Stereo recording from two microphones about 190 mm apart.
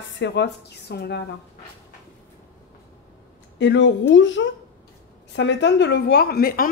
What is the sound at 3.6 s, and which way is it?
A woman's voice, 70° left (ahead or behind).